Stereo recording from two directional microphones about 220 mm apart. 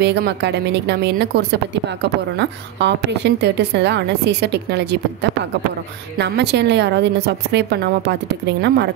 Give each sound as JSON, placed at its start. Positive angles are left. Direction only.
{"t": 0.0, "sound": "a woman's voice", "side_deg": -50}
{"t": 6.1, "sound": "a woman's voice", "side_deg": -50}